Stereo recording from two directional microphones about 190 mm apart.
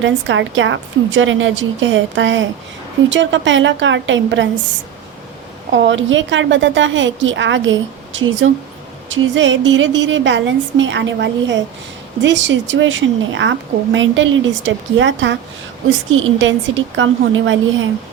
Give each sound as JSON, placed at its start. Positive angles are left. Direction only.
{"t": 0.0, "sound": "a woman's voice", "side_deg": -80}
{"t": 16.4, "sound": "a woman's voice", "side_deg": -80}